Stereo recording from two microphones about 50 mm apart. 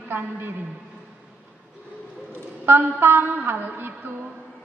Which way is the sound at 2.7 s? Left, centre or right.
Right.